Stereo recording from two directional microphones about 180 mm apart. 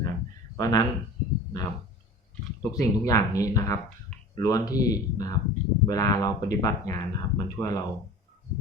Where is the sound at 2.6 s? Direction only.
20° left (ahead or behind).